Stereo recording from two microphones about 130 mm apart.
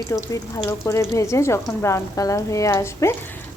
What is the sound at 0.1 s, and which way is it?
A woman's voice, 25° left (ahead or behind).